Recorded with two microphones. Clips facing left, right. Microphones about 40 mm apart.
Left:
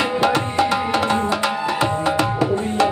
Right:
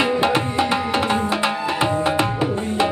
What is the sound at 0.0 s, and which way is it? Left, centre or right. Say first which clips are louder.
Tabla: even; right.